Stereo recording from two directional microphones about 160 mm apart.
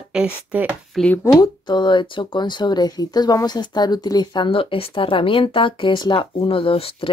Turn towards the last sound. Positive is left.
turn(degrees=35)  # may be behind; listen again after turning